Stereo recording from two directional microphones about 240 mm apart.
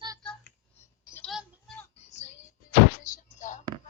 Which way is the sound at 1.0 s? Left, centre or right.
Centre.